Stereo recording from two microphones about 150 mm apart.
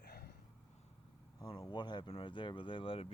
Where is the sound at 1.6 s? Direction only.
30° left (ahead or behind).